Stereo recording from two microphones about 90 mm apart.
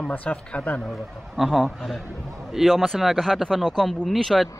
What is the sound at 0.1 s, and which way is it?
Speech, 15° left (ahead or behind).